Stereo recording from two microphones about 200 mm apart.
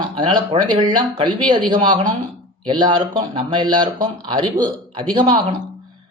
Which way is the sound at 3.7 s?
20° right (ahead or behind).